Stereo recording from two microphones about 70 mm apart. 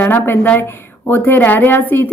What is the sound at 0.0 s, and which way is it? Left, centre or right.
A woman's voice, left.